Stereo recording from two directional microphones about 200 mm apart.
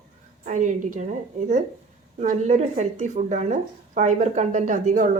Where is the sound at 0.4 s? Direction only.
40° right (ahead or behind).